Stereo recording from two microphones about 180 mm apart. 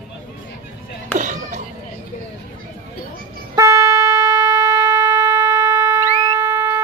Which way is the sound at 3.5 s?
15° right (ahead or behind).